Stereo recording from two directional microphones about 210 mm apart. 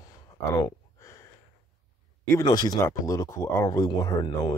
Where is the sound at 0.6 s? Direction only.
15° left (ahead or behind).